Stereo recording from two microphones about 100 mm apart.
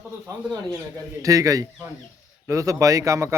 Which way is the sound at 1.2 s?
35° right (ahead or behind).